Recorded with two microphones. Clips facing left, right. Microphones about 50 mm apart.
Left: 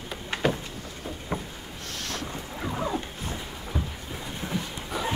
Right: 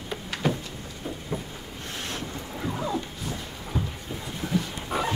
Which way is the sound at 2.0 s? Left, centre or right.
Right.